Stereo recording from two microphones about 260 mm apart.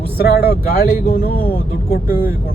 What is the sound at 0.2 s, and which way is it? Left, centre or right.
Speech, left.